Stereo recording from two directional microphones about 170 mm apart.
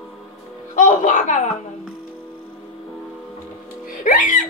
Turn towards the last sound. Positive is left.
turn(degrees=50)  # may be behind; listen again after turning